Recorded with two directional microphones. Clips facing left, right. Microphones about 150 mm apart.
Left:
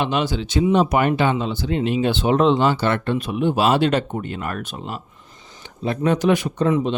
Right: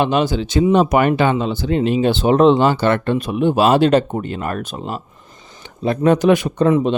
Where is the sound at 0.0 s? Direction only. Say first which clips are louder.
Right 5 dB; 45° right (ahead or behind).